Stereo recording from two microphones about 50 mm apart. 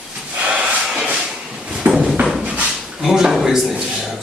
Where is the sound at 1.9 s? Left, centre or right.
Centre.